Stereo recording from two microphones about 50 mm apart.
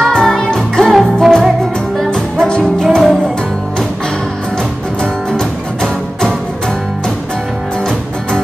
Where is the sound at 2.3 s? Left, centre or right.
Centre.